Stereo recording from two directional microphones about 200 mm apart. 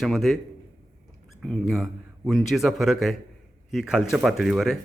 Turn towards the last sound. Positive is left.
turn(degrees=0)  # may be behind; listen again after turning